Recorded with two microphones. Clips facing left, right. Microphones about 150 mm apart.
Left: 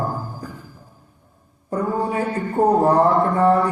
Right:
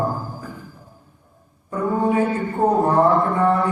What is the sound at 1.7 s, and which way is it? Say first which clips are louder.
A man's voice: right 2 dB; 35° left (ahead or behind).